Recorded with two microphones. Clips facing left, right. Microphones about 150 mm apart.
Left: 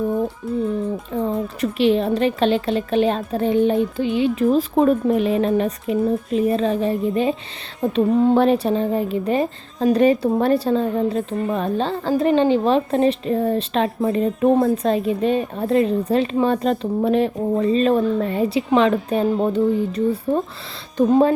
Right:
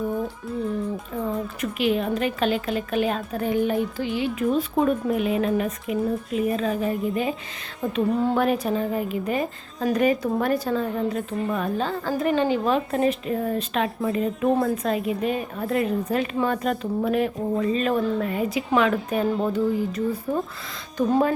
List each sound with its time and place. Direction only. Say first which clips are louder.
0.4 s speech: left 6 dB; centre (ahead or behind)
1.1 s a woman's voice: left 6 dB; 30° left (ahead or behind)